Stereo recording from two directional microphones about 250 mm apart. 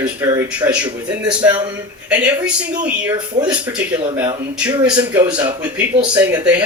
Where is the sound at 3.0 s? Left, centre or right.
Centre.